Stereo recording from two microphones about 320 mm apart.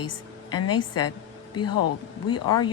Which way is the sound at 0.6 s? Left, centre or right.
Left.